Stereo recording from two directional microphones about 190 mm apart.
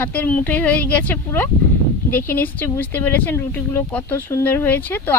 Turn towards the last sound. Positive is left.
turn(degrees=10)  # may be behind; listen again after turning